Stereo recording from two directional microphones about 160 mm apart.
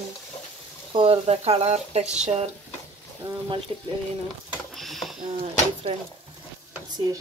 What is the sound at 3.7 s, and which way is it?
Speech, 30° right (ahead or behind).